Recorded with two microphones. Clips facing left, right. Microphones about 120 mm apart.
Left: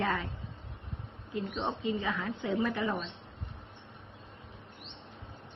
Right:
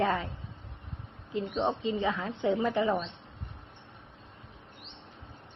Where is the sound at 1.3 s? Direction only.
20° right (ahead or behind).